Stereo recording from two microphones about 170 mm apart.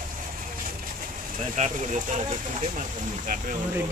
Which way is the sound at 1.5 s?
45° right (ahead or behind).